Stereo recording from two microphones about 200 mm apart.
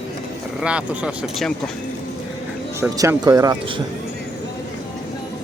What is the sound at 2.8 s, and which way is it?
Speech, 15° right (ahead or behind).